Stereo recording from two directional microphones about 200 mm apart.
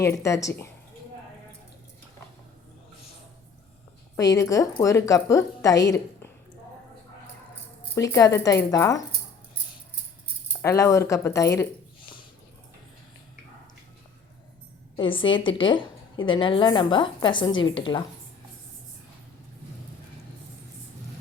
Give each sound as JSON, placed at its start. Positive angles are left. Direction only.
{"t": 0.0, "sound": "a woman's voice", "side_deg": 15}
{"t": 4.2, "sound": "a woman's voice", "side_deg": 15}
{"t": 7.9, "sound": "a woman's voice", "side_deg": 15}
{"t": 10.6, "sound": "a woman's voice", "side_deg": 15}
{"t": 14.9, "sound": "a woman's voice", "side_deg": 25}